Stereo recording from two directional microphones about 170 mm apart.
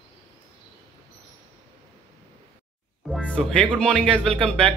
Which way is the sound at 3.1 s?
5° left (ahead or behind).